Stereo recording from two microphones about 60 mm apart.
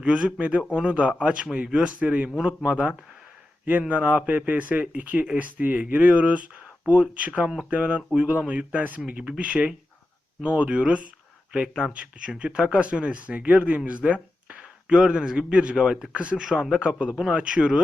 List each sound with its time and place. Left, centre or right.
0.0 s speech: centre